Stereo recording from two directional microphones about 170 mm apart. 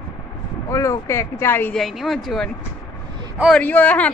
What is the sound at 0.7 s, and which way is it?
Speech, 20° left (ahead or behind).